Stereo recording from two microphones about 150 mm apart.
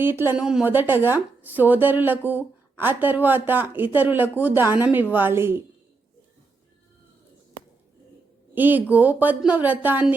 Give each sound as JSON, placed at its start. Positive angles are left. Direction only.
{"t": 0.0, "sound": "speech", "side_deg": -15}
{"t": 8.5, "sound": "speech", "side_deg": -10}